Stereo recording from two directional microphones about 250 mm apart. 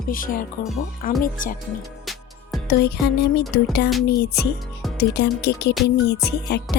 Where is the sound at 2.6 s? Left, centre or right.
Left.